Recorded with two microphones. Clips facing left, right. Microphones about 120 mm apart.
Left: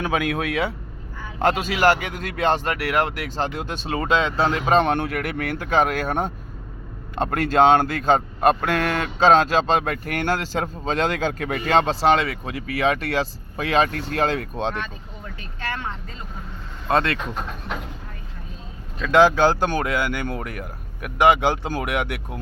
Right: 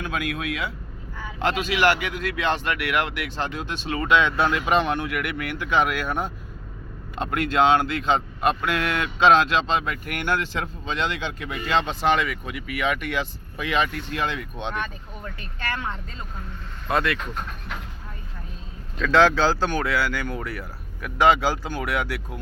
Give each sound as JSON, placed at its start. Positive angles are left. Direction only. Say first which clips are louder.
{"t": 1.4, "sound": "speech", "louder": "left 2 dB", "side_deg": 45}
{"t": 16.9, "sound": "speech", "louder": "left 3 dB", "side_deg": 25}
{"t": 18.9, "sound": "speech", "louder": "left 2 dB", "side_deg": 10}